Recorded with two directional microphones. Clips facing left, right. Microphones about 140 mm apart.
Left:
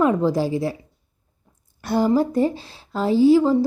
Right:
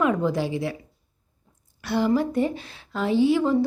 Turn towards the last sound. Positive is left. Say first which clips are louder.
# left 5 dB
turn(degrees=35)  # may be behind; listen again after turning